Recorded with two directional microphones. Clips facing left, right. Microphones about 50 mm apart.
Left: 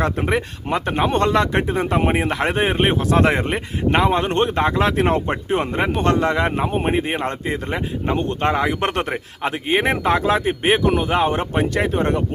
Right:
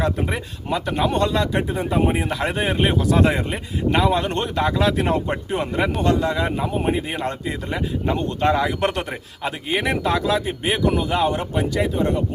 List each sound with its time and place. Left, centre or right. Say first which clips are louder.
0.0 s speech: left 3 dB; left
2.0 s speech: right 1 dB; left